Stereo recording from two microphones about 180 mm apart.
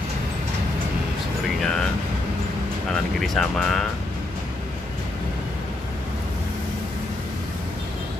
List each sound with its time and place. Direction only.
1.6 s vehicle: 5° left (ahead or behind)
3.2 s speech: centre (ahead or behind)